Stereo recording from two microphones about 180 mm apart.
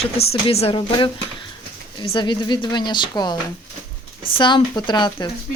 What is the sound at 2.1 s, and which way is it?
Speech, 25° left (ahead or behind).